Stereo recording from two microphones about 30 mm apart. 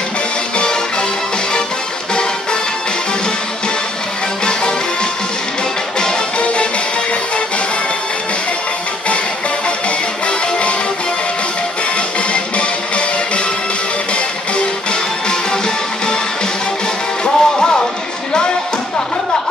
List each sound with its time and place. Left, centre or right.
6.4 s music: left
9.8 s music: left
12.3 s music: left
14.1 s music: left
17.2 s music: left